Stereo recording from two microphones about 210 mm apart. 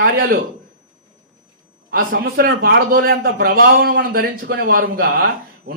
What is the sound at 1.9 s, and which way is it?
A man's voice, 45° right (ahead or behind).